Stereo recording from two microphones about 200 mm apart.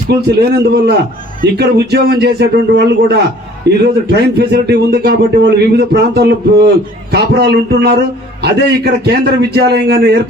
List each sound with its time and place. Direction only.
0.1 s a man's voice: 55° right (ahead or behind)